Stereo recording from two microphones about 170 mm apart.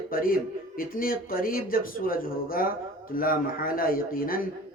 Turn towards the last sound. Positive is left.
turn(degrees=60)  # may be behind; listen again after turning